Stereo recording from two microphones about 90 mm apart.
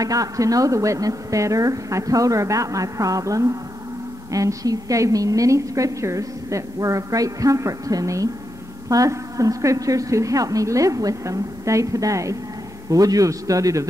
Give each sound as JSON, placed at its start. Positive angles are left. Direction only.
{"t": 0.0, "sound": "a woman's voice", "side_deg": -40}